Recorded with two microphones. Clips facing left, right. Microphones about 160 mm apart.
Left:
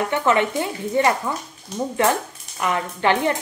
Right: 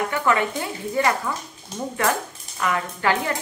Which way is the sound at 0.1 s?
25° left (ahead or behind).